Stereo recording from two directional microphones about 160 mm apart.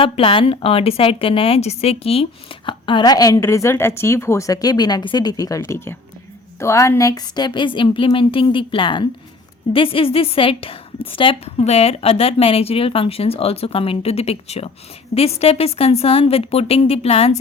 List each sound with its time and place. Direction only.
0.0 s a woman's voice: 35° left (ahead or behind)